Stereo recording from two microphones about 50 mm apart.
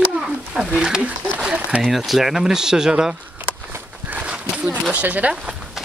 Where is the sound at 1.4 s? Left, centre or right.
Centre.